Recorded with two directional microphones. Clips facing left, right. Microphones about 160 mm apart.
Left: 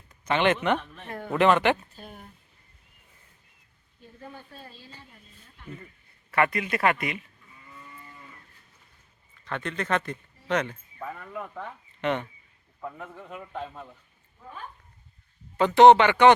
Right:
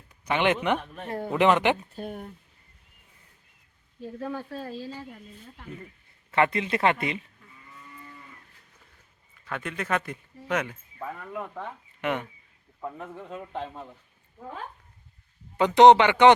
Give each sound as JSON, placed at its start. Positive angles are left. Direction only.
{"t": 0.1, "sound": "a man's voice", "side_deg": -10}
{"t": 1.0, "sound": "a man's voice", "side_deg": -30}
{"t": 1.3, "sound": "speech", "side_deg": -15}
{"t": 2.0, "sound": "speech", "side_deg": -50}
{"t": 4.0, "sound": "speech", "side_deg": -85}
{"t": 6.3, "sound": "a man's voice", "side_deg": -25}
{"t": 9.4, "sound": "speech", "side_deg": -5}
{"t": 13.3, "sound": "a man's voice", "side_deg": -25}
{"t": 14.4, "sound": "speech", "side_deg": -50}
{"t": 15.5, "sound": "a man's voice", "side_deg": -15}